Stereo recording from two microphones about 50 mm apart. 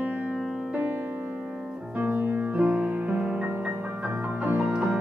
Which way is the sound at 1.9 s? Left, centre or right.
Right.